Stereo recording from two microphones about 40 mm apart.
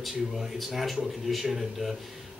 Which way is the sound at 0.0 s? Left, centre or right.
Centre.